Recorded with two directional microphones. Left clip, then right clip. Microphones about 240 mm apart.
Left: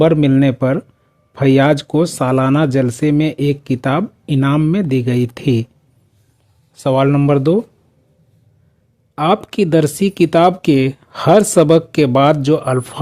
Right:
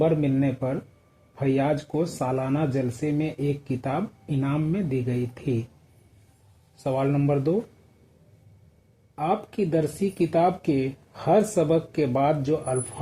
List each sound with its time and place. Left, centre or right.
0.0 s speech: left
6.8 s speech: left
9.1 s speech: left